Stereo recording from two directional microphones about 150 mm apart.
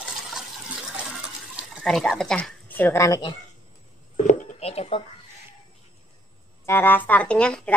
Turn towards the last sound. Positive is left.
turn(degrees=5)  # may be behind; listen again after turning